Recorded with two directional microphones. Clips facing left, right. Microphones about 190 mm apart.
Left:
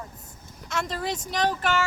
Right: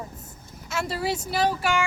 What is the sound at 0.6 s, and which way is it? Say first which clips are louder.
Speech: right 2 dB; 5° right (ahead or behind).